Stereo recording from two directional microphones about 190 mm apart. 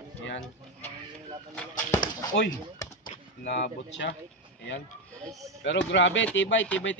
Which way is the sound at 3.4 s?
70° left (ahead or behind).